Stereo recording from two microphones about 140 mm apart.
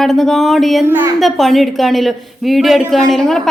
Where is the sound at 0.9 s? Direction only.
15° right (ahead or behind).